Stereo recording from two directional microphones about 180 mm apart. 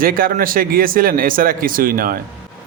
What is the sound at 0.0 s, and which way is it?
A man's voice, 50° right (ahead or behind).